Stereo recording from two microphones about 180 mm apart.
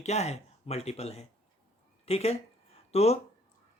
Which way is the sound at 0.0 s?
40° left (ahead or behind).